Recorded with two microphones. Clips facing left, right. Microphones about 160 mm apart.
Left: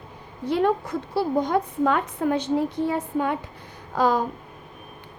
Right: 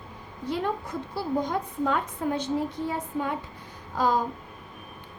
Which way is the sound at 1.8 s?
70° left (ahead or behind).